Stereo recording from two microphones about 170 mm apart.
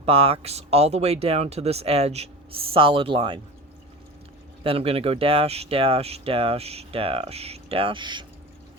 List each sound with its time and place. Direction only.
0.0 s speech: 35° right (ahead or behind)
4.6 s speech: 35° right (ahead or behind)